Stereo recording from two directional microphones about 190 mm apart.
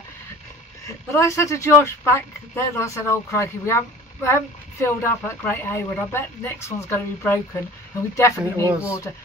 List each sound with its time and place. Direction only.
0.8 s speech: 15° left (ahead or behind)
8.6 s speech: 5° right (ahead or behind)